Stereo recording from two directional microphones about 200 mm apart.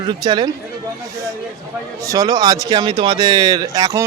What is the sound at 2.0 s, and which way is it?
Speech, 15° right (ahead or behind).